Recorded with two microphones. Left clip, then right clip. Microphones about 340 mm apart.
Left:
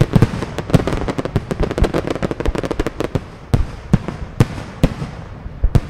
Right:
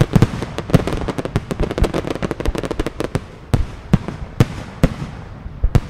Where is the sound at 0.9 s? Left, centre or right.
Centre.